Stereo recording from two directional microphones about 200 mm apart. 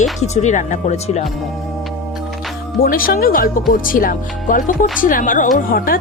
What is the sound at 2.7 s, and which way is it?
A woman's voice, 45° left (ahead or behind).